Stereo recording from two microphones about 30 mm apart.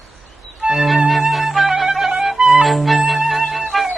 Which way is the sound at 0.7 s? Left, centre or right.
Centre.